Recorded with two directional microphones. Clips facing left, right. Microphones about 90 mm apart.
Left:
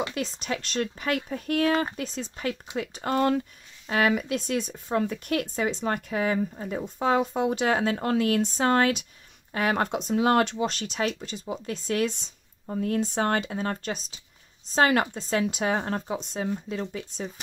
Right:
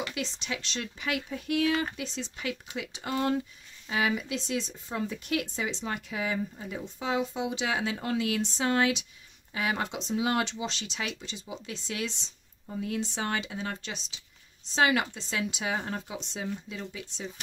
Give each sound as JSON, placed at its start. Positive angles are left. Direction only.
{"t": 0.1, "sound": "speech", "side_deg": 45}